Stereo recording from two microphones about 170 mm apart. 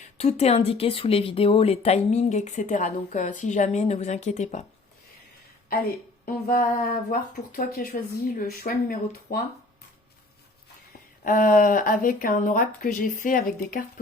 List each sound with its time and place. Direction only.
0.2 s speech: 40° left (ahead or behind)
6.2 s speech: 60° left (ahead or behind)
11.2 s speech: 55° left (ahead or behind)